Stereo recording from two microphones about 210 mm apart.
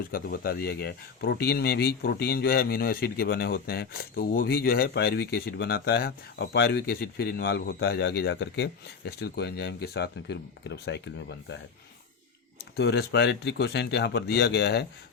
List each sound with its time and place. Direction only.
0.0 s speech: 45° left (ahead or behind)
12.7 s speech: 50° left (ahead or behind)